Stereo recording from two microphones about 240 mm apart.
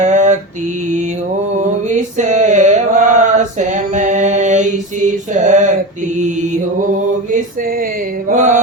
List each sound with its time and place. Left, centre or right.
0.0 s mantra: right
1.9 s mantra: right
8.3 s mantra: right